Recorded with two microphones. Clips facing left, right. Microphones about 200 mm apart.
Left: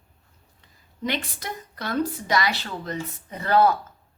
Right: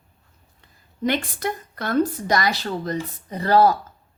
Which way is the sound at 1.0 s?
50° right (ahead or behind).